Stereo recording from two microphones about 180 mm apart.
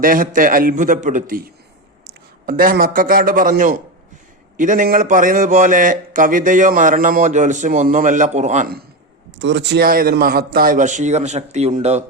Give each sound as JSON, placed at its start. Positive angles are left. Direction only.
{"t": 0.0, "sound": "a man's voice", "side_deg": -50}
{"t": 2.5, "sound": "a man's voice", "side_deg": -50}
{"t": 9.4, "sound": "a man's voice", "side_deg": -80}